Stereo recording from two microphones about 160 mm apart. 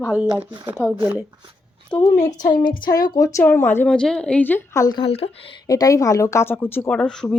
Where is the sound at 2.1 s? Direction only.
50° left (ahead or behind).